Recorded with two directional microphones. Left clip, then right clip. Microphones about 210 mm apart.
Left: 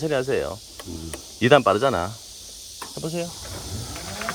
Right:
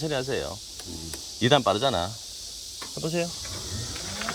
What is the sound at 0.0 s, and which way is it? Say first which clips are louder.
Speech: left 5 dB; 20° left (ahead or behind).